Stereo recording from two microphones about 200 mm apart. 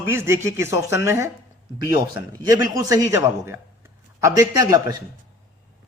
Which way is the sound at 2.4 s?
20° right (ahead or behind).